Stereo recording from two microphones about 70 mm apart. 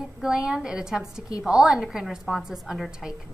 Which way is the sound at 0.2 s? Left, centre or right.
Centre.